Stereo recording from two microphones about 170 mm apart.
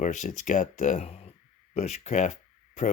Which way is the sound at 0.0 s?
45° left (ahead or behind).